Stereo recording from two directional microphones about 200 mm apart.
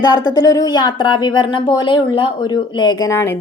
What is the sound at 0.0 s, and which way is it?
A woman's voice, 20° left (ahead or behind).